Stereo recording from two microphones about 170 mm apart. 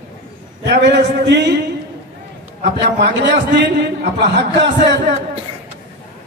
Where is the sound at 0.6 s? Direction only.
85° right.